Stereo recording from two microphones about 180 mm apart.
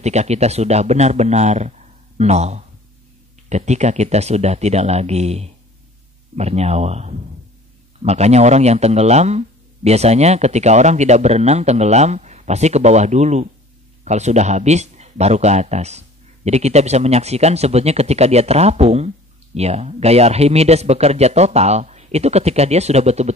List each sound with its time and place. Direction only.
0.0 s speech: 40° right (ahead or behind)